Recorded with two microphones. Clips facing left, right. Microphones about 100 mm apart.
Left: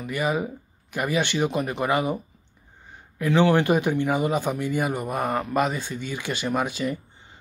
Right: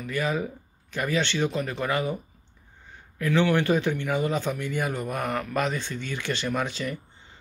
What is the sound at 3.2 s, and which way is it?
Speech, 20° left (ahead or behind).